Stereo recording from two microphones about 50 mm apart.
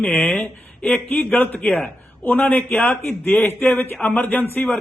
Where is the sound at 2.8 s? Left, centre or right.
Left.